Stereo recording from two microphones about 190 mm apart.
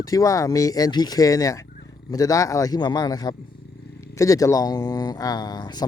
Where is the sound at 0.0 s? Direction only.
20° left (ahead or behind).